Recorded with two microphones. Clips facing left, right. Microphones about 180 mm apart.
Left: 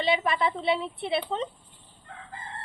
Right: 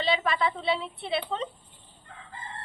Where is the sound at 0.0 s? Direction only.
20° left (ahead or behind).